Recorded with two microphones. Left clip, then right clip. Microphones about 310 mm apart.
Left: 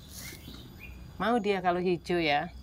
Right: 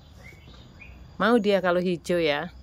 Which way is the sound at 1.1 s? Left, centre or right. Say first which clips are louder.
Right 7 dB; centre.